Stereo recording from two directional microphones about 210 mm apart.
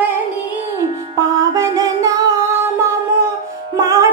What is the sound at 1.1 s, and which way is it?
Music, 15° right (ahead or behind).